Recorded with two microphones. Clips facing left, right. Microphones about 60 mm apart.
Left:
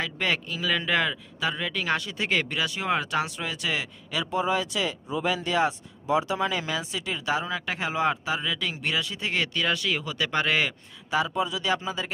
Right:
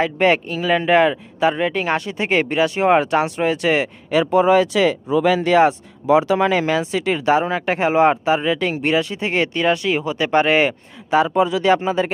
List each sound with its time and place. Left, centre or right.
0.0 s speech: right
4.3 s speech: right
11.1 s speech: right